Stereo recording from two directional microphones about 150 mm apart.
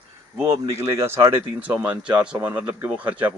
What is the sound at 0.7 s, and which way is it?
Speech, 20° right (ahead or behind).